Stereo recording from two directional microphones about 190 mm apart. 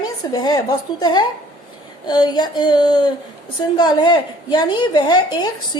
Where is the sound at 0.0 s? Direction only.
20° left (ahead or behind).